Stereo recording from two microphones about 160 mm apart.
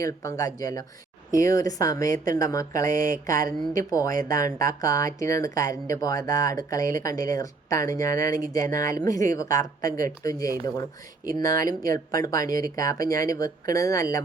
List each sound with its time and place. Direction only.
0.0 s speech: 20° left (ahead or behind)